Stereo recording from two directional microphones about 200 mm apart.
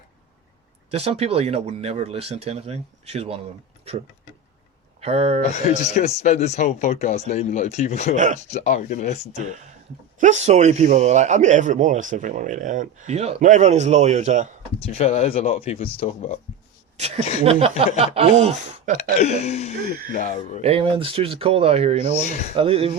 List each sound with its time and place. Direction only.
0.9 s speech: 30° right (ahead or behind)
4.9 s speech: 30° right (ahead or behind)
5.4 s speech: 35° left (ahead or behind)
8.1 s speech: 35° right (ahead or behind)
8.4 s speech: 35° left (ahead or behind)
10.2 s speech: 35° right (ahead or behind)
14.8 s speech: 30° left (ahead or behind)
17.4 s speech: 30° right (ahead or behind)
19.2 s speech: 35° left (ahead or behind)
20.6 s speech: 30° right (ahead or behind)
22.2 s speech: 35° left (ahead or behind)
22.5 s speech: 30° right (ahead or behind)